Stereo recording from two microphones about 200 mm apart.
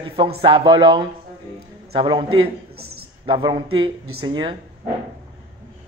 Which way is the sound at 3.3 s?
25° right (ahead or behind).